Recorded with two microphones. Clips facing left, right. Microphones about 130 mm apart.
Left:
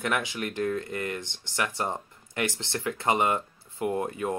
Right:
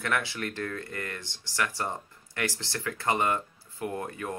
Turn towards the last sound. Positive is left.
turn(degrees=20)  # may be behind; listen again after turning